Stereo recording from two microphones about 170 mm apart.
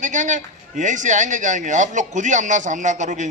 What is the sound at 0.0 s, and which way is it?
A man's voice, 45° right (ahead or behind).